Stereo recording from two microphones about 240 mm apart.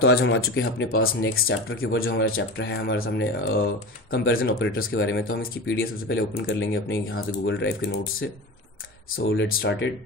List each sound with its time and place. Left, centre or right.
0.1 s speech: left
1.3 s speech: left